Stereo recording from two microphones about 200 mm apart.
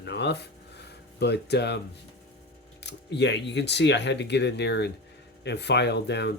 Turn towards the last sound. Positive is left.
turn(degrees=60)  # may be behind; listen again after turning